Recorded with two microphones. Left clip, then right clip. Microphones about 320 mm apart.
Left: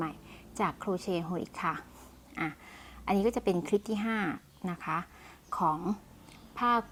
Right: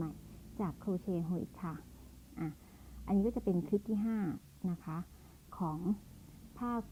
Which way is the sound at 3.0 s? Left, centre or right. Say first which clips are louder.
Left 7 dB; centre.